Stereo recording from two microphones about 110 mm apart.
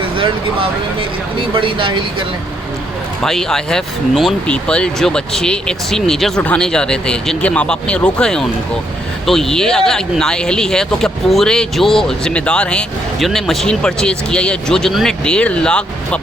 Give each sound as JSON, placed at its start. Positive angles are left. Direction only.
{"t": 1.4, "sound": "speech", "side_deg": -50}
{"t": 3.2, "sound": "speech", "side_deg": 5}